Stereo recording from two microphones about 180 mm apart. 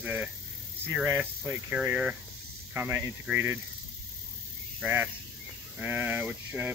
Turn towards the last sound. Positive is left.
turn(degrees=-10)  # may be behind; listen again after turning